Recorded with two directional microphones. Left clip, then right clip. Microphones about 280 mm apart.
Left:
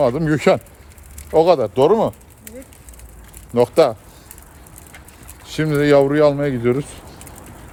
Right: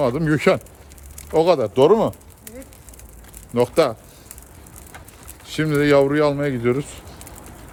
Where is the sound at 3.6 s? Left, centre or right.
Centre.